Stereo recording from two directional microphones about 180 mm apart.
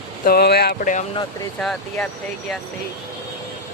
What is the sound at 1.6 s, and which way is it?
Speech, 5° left (ahead or behind).